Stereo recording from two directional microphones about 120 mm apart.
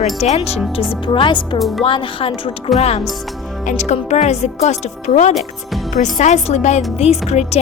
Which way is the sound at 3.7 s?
80° left.